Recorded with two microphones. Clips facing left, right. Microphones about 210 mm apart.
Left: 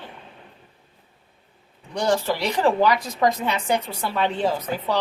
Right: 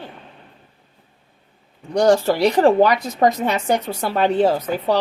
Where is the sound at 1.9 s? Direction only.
45° right (ahead or behind).